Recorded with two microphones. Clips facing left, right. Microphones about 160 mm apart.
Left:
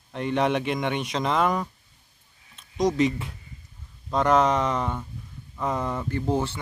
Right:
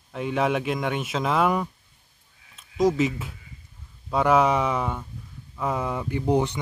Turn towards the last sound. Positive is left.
turn(degrees=-15)  # may be behind; listen again after turning